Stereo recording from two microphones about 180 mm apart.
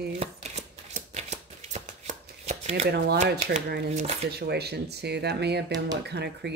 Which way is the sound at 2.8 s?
65° right (ahead or behind).